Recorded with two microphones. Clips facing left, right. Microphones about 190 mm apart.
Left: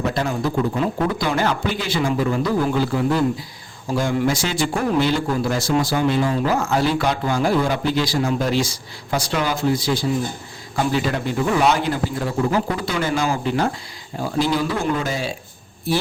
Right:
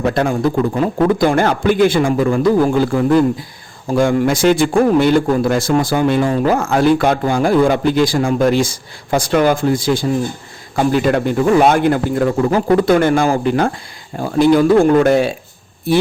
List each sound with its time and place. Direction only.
0.0 s a man's voice: 55° right (ahead or behind)